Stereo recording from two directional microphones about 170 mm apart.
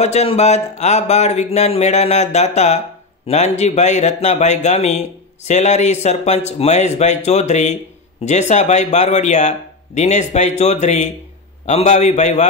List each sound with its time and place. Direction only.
0.0 s speech: 35° left (ahead or behind)